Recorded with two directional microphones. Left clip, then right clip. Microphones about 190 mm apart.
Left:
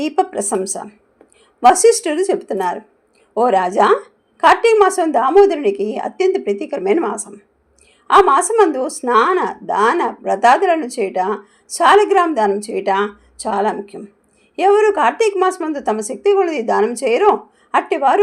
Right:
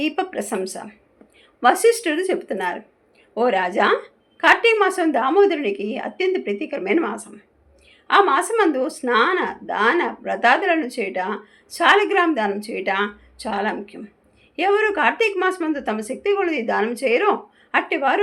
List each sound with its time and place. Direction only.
0.0 s a woman's voice: 40° left (ahead or behind)